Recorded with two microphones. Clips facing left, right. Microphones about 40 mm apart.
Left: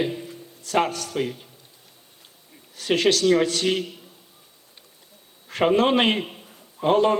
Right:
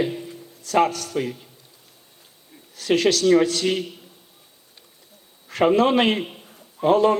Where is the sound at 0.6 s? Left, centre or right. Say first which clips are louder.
Right 3 dB; left.